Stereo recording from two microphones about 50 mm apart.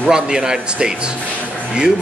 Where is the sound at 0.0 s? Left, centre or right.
Centre.